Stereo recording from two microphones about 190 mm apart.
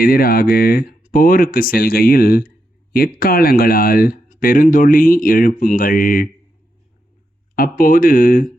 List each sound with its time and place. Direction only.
0.0 s speech: 50° left (ahead or behind)
7.5 s speech: 50° left (ahead or behind)